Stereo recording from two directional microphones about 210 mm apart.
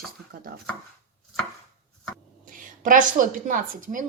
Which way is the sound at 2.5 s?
40° right (ahead or behind).